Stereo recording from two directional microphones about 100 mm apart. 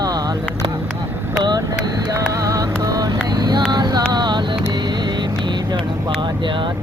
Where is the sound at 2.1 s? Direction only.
35° right (ahead or behind).